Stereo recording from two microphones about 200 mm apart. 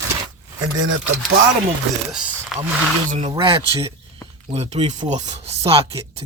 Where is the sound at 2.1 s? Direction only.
5° right (ahead or behind).